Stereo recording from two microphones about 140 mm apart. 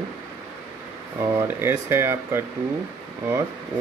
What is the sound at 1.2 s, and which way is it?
Mantra, 20° right (ahead or behind).